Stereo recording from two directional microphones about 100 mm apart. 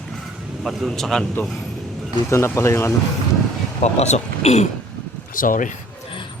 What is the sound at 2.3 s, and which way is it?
Speech, 30° left (ahead or behind).